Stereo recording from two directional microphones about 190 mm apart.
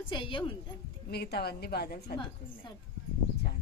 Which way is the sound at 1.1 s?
55° left (ahead or behind).